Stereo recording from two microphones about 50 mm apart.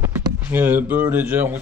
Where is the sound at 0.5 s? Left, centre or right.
Right.